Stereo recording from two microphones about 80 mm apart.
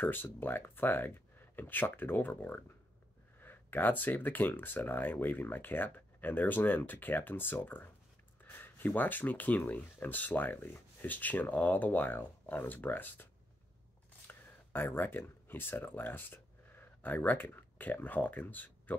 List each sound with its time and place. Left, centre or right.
0.0 s speech: left